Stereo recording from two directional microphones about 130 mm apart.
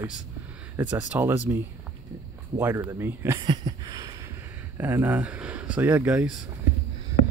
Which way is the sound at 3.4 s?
35° right (ahead or behind).